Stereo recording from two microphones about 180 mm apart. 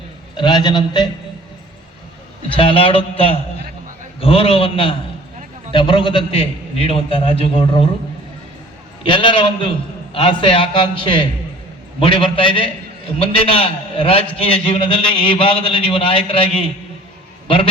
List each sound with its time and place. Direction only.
0.3 s a man's voice: 25° left (ahead or behind)
2.6 s a man's voice: 30° left (ahead or behind)
9.0 s a man's voice: 30° left (ahead or behind)